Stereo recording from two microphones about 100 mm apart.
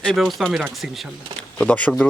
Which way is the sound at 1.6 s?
15° left (ahead or behind).